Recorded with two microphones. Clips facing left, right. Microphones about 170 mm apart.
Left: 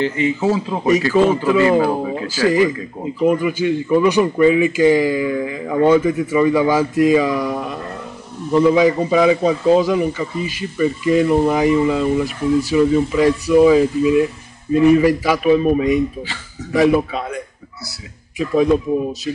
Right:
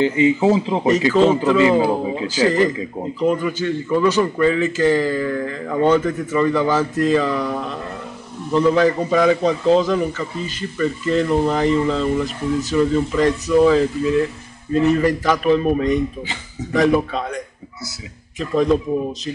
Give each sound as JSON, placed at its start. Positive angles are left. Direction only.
{"t": 0.0, "sound": "a man's voice", "side_deg": -20}
{"t": 2.4, "sound": "a man's voice", "side_deg": 10}
{"t": 18.4, "sound": "a man's voice", "side_deg": 10}